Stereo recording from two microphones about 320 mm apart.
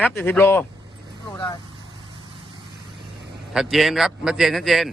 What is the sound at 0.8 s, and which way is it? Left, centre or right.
Vehicle, centre.